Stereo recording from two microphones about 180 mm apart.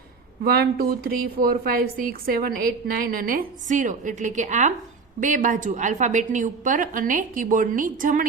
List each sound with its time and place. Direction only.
0.4 s a woman's voice: 60° right (ahead or behind)